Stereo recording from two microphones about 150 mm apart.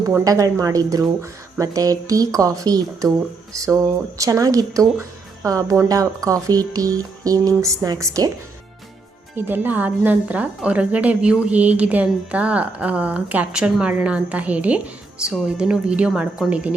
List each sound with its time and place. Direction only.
0.3 s speech: 20° right (ahead or behind)
9.3 s a woman's voice: 15° right (ahead or behind)